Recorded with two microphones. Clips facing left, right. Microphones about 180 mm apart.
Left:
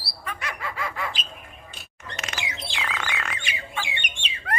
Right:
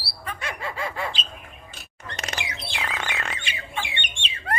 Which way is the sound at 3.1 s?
25° right (ahead or behind).